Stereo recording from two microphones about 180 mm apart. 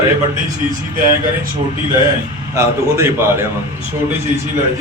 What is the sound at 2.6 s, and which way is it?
Speech, 15° right (ahead or behind).